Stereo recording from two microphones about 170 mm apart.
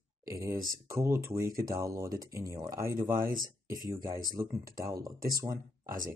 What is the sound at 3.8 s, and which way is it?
Speech, 25° right (ahead or behind).